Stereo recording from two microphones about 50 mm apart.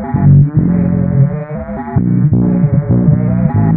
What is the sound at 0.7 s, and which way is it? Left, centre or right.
Music, centre.